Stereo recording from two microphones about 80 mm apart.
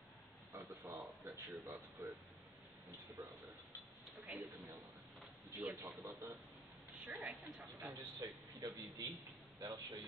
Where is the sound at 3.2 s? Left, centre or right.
Right.